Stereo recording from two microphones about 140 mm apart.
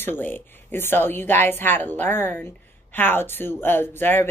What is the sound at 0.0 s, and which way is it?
Speech, 15° left (ahead or behind).